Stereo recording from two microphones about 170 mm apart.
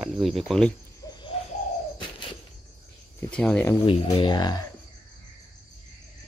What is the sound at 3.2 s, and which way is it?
Speech, 5° left (ahead or behind).